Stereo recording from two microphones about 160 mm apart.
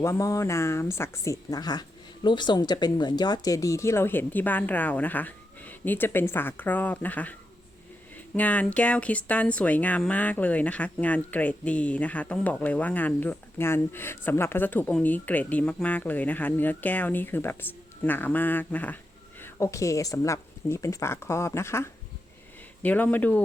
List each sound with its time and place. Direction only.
0.0 s speech: 20° left (ahead or behind)
8.4 s speech: 10° left (ahead or behind)